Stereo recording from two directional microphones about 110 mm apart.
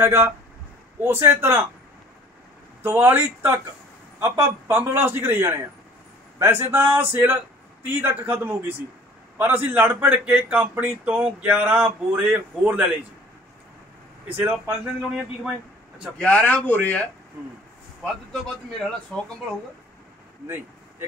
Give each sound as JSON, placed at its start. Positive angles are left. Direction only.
{"t": 0.0, "sound": "a man's voice", "side_deg": -20}
{"t": 3.0, "sound": "a man's voice", "side_deg": -20}
{"t": 14.5, "sound": "a man's voice", "side_deg": -5}
{"t": 16.2, "sound": "speech", "side_deg": 10}
{"t": 19.1, "sound": "speech", "side_deg": 10}